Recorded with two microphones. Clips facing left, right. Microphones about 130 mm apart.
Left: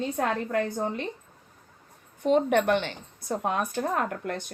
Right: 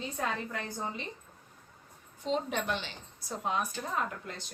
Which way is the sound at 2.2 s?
60° left (ahead or behind).